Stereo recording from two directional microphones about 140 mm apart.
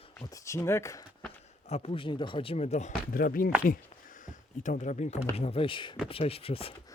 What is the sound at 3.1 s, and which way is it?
Speech, 90° left.